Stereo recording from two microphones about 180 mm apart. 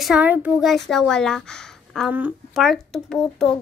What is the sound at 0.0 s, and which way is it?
A woman's voice, 5° right (ahead or behind).